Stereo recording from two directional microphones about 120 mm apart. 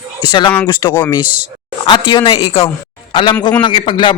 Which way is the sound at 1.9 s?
45° left (ahead or behind).